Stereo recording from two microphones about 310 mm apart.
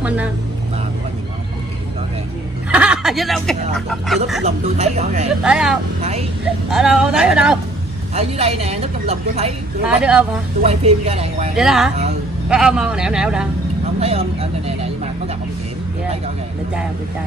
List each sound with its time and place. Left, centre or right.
0.0 s speech: centre
2.7 s chuckle: centre
3.7 s speech: centre
4.5 s a woman's voice: right
5.4 s speech: centre
8.1 s a woman's voice: centre
10.6 s a woman's voice: centre
11.5 s speech: centre
13.9 s a woman's voice: centre